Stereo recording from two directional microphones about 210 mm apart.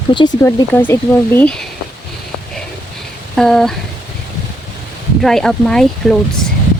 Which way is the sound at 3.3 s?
Centre (ahead or behind).